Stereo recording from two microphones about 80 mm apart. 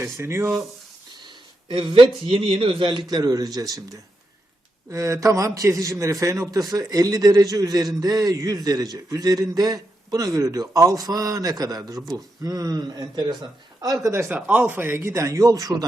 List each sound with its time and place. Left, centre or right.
0.0 s a man's voice: right
1.6 s a man's voice: right
3.1 s a man's voice: right
4.9 s a man's voice: right
14.1 s a man's voice: right
14.3 s a man's voice: centre; by 15.9 s right